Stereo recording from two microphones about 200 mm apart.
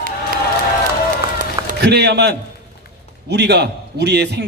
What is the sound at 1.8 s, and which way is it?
A man's voice, 55° right (ahead or behind).